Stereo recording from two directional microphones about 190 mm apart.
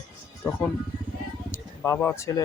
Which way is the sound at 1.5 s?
10° left (ahead or behind).